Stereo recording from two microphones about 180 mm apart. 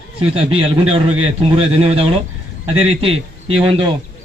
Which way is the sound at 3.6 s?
25° right (ahead or behind).